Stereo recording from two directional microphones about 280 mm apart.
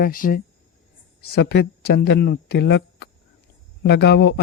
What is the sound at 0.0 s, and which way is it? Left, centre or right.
Speech, left.